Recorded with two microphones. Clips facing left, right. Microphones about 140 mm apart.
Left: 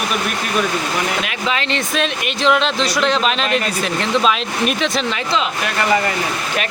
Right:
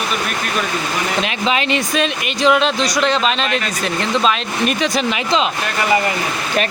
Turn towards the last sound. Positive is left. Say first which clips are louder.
# right 1 dB
turn(degrees=0)  # may be behind; listen again after turning